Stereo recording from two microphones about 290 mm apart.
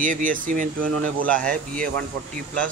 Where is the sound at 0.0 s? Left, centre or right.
Right.